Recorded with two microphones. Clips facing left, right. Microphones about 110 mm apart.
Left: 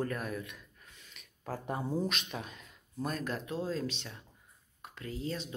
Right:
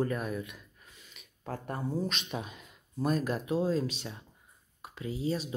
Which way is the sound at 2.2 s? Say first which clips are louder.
Right 4 dB; 10° right (ahead or behind).